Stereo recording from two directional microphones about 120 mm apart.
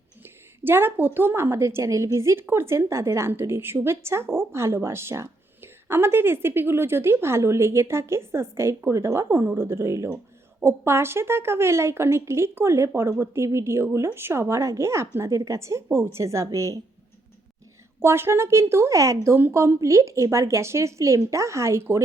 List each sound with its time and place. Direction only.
0.2 s a woman's voice: 20° right (ahead or behind)
18.0 s a woman's voice: 20° right (ahead or behind)